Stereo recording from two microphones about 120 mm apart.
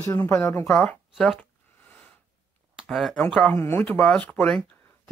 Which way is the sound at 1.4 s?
15° left (ahead or behind).